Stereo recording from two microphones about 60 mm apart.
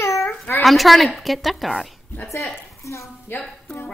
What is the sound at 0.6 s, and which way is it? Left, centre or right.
A woman's voice, centre.